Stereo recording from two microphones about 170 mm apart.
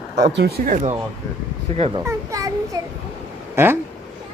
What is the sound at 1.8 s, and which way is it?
Speech, 35° right (ahead or behind).